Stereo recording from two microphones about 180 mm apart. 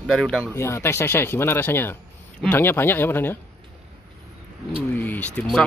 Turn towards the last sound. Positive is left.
turn(degrees=5)  # may be behind; listen again after turning